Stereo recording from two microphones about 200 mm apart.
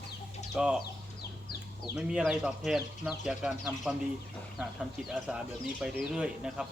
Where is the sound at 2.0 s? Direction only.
5° right (ahead or behind).